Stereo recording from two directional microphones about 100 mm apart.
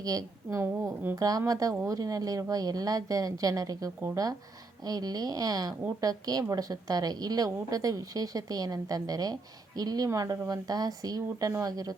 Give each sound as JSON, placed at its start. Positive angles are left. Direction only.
{"t": 0.0, "sound": "a woman's voice", "side_deg": -40}
{"t": 0.6, "sound": "speech", "side_deg": -25}
{"t": 1.1, "sound": "a woman's voice", "side_deg": -40}